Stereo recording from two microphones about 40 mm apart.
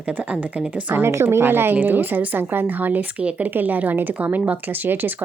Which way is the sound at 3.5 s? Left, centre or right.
Right.